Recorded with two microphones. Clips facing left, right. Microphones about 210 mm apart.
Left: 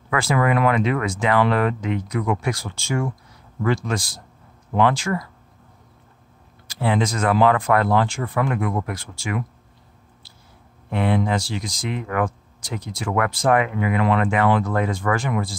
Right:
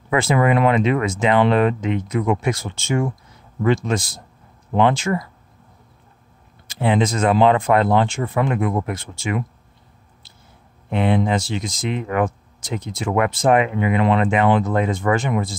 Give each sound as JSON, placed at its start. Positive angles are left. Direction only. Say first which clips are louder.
{"t": 0.1, "sound": "speech", "louder": "right 3 dB", "side_deg": -20}
{"t": 6.7, "sound": "speech", "louder": "right 3 dB", "side_deg": -20}
{"t": 10.9, "sound": "speech", "louder": "right 2 dB", "side_deg": -20}